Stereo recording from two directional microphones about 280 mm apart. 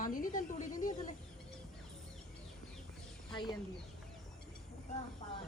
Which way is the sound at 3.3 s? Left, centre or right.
Centre.